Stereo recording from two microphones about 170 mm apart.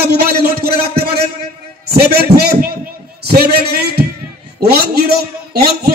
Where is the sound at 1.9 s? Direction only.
70° right (ahead or behind).